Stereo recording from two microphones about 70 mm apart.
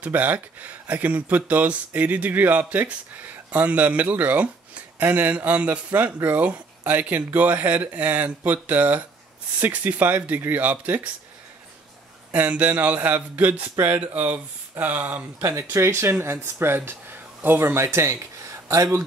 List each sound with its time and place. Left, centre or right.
0.0 s speech: right
12.3 s speech: right
15.7 s speech: right